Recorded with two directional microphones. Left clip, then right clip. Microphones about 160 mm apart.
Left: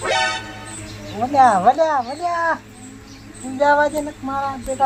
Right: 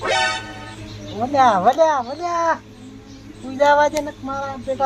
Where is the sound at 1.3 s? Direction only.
15° right (ahead or behind).